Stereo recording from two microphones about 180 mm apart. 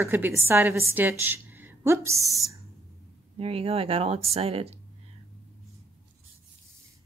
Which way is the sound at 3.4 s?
30° right (ahead or behind).